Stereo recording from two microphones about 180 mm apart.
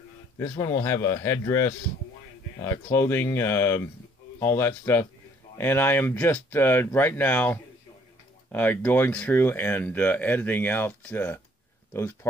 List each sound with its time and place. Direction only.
0.4 s speech: 20° left (ahead or behind)